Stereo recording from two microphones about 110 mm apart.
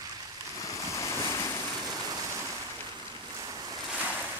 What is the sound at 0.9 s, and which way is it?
Waves, 25° left (ahead or behind).